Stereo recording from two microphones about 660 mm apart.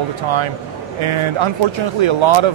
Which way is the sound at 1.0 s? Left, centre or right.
Right.